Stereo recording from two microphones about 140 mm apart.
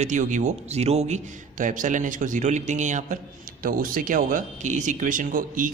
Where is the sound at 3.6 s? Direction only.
90° right.